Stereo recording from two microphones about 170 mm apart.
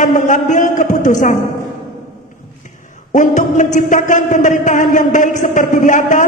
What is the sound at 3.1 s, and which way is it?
A woman's voice, 45° left (ahead or behind).